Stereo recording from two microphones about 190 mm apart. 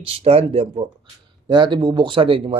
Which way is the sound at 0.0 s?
30° right (ahead or behind).